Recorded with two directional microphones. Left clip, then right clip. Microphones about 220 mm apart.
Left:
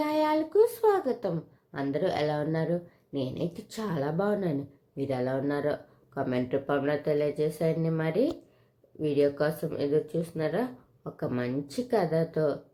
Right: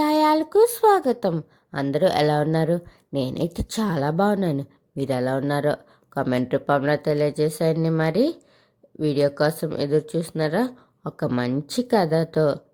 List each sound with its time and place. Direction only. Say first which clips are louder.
0.0 s a woman's voice: right 8 dB; 45° right (ahead or behind)